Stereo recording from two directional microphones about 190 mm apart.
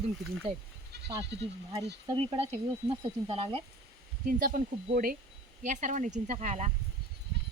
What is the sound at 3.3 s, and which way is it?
Speech, 30° right (ahead or behind).